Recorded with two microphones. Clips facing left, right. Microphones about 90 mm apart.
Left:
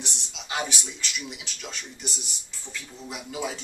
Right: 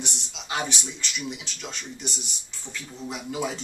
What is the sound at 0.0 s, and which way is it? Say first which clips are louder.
A man's voice: right 2 dB; centre (ahead or behind).